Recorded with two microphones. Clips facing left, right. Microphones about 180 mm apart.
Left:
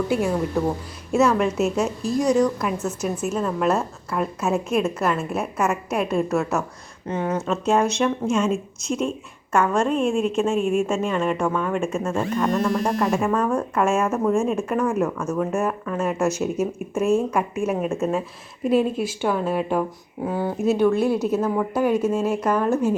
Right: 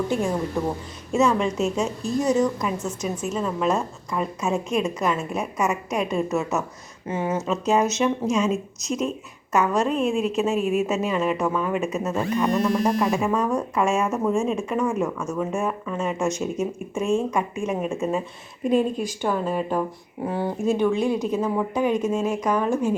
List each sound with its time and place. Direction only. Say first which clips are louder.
1.1 s a woman's voice: left 2 dB; 5° left (ahead or behind)